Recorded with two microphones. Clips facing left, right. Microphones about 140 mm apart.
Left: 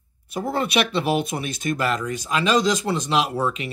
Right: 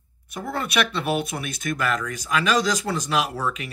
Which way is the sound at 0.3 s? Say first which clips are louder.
Left 5 dB; 30° left (ahead or behind).